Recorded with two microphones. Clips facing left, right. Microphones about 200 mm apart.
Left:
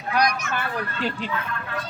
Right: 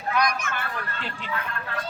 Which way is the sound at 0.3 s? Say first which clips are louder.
Left 1 dB; 55° right (ahead or behind).